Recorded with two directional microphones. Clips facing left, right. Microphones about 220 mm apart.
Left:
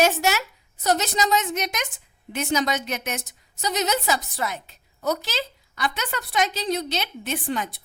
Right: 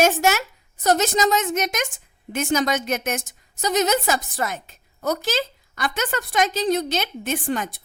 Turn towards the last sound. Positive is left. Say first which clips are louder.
# right 2 dB
turn(degrees=-45)  # may be behind; listen again after turning